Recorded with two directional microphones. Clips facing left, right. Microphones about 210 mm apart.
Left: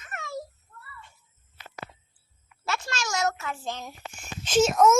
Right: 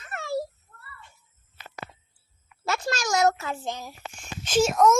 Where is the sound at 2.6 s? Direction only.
35° right (ahead or behind).